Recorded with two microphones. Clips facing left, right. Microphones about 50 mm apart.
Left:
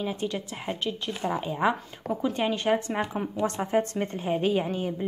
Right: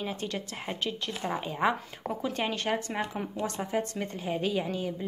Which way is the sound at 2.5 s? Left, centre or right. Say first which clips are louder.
Left 5 dB; centre.